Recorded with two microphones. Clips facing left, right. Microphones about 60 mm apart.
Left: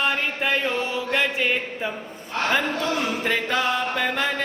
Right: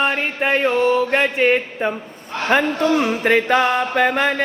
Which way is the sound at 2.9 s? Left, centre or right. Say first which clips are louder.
Right 8 dB; right.